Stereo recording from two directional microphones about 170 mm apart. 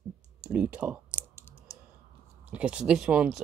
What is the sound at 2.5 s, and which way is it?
Speech, 5° right (ahead or behind).